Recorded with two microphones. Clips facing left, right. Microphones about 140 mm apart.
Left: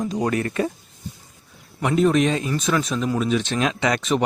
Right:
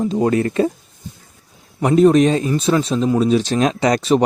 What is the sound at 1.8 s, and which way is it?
Speech, 40° right (ahead or behind).